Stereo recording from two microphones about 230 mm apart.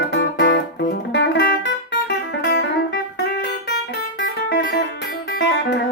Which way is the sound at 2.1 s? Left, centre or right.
Left.